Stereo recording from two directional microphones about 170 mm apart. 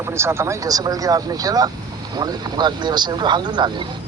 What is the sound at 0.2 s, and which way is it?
Speech, 15° right (ahead or behind).